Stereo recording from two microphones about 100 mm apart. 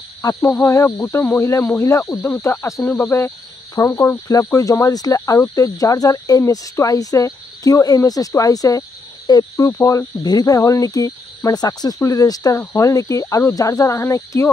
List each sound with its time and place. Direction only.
0.2 s speech: 35° left (ahead or behind)